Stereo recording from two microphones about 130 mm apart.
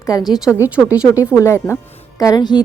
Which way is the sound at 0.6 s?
25° left (ahead or behind).